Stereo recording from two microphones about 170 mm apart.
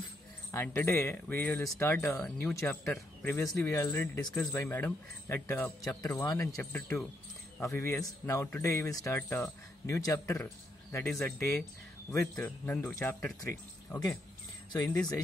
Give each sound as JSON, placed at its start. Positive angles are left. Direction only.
{"t": 0.5, "sound": "speech", "side_deg": 15}